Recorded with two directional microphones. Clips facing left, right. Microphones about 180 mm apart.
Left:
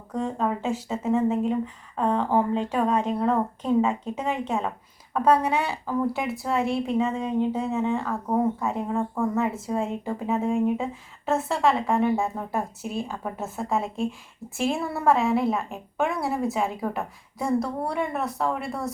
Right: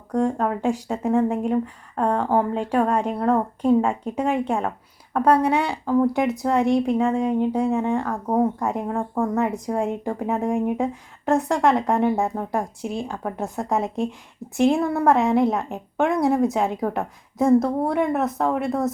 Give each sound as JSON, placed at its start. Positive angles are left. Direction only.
{"t": 0.1, "sound": "a woman's voice", "side_deg": -15}
{"t": 2.1, "sound": "a woman's voice", "side_deg": -10}